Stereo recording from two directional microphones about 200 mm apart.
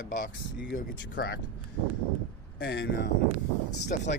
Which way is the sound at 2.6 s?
55° left (ahead or behind).